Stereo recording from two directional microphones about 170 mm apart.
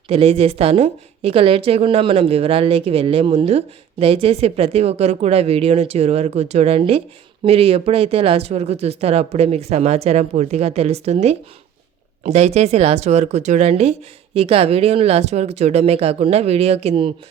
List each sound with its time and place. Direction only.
0.1 s a woman's voice: 35° right (ahead or behind)